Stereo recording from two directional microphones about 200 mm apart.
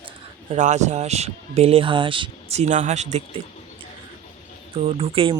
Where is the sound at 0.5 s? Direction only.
35° right (ahead or behind).